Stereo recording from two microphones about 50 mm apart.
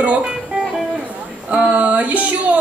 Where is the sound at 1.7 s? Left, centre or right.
Right.